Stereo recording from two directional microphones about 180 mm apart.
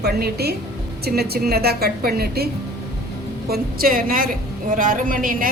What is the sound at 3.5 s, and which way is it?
Speech, 55° right (ahead or behind).